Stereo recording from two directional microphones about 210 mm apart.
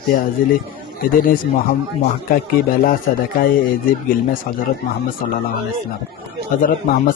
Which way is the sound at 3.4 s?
40° left (ahead or behind).